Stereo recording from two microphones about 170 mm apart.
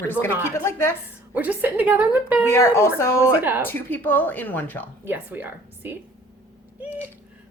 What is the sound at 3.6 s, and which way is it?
A woman's voice, 10° left (ahead or behind).